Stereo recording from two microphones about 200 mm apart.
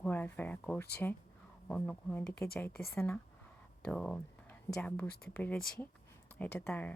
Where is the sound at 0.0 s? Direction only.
10° left (ahead or behind).